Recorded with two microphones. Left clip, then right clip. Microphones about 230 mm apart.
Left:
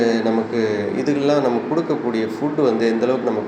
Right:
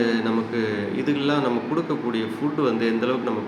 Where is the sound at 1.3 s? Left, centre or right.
Right.